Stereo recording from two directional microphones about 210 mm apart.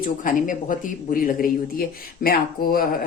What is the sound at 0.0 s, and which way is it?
Speech, 40° left (ahead or behind).